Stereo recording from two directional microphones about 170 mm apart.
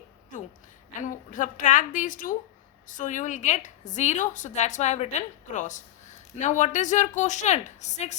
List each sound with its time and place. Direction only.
1.0 s a woman's voice: 50° left (ahead or behind)